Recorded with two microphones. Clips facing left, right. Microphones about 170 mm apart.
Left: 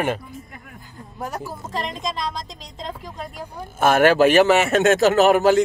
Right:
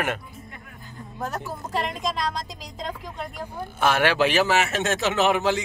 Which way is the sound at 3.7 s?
50° left (ahead or behind).